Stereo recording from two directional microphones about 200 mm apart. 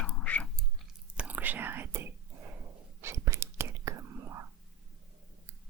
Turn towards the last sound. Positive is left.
turn(degrees=-15)  # may be behind; listen again after turning